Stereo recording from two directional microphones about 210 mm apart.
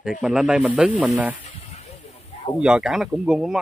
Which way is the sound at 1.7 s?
30° left (ahead or behind).